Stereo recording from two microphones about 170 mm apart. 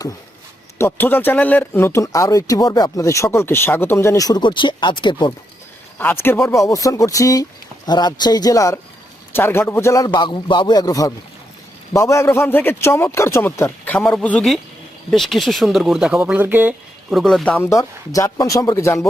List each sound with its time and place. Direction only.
0.8 s speech: 10° left (ahead or behind); by 5.3 s 30° left (ahead or behind)
6.0 s a man's voice: 10° left (ahead or behind)
17.7 s a man's voice: 20° left (ahead or behind)